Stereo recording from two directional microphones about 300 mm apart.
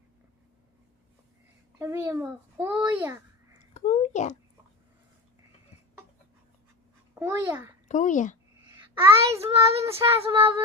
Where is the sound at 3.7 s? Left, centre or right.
Left.